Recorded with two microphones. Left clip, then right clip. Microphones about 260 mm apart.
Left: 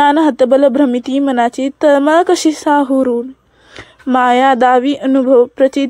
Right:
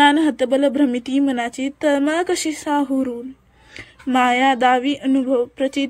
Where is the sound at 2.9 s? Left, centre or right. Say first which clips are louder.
Left 9 dB; left.